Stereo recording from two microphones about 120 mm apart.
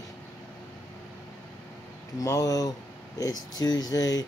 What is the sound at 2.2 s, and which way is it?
Speech, 30° left (ahead or behind).